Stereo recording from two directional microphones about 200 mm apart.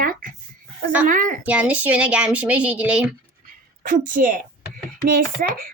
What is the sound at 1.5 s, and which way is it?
Speech, 5° right (ahead or behind).